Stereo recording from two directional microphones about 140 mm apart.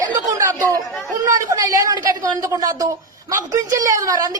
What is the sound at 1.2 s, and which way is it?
A woman's voice, 25° right (ahead or behind).